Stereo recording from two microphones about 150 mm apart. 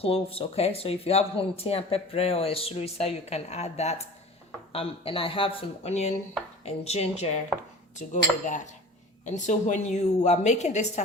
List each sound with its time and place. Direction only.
0.0 s a woman's voice: 40° left (ahead or behind)
7.9 s cutlery: 55° left (ahead or behind)
9.2 s a woman's voice: 55° left (ahead or behind)